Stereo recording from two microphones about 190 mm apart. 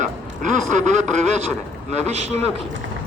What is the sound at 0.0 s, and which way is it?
A man's voice, 40° right (ahead or behind).